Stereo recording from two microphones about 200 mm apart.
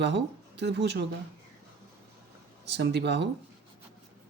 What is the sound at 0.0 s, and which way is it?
Speech, 60° right (ahead or behind).